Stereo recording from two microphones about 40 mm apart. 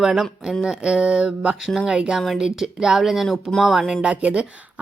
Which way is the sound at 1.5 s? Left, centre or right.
Centre.